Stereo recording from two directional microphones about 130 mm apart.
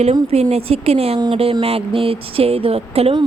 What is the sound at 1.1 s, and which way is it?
Speech, 35° right (ahead or behind).